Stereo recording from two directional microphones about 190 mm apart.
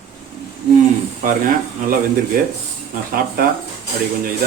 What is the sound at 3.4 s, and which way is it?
Speech, 50° right (ahead or behind).